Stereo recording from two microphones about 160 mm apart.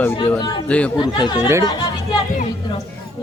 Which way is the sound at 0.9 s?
30° left (ahead or behind).